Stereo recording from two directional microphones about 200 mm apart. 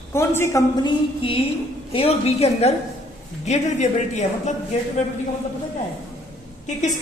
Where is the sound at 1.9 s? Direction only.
30° left (ahead or behind).